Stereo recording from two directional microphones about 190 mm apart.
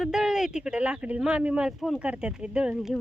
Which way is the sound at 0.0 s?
5° right (ahead or behind).